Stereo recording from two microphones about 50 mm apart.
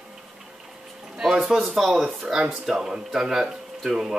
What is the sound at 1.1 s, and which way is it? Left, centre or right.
Speech, centre.